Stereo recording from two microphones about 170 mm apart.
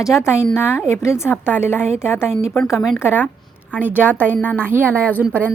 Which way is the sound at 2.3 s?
Centre (ahead or behind).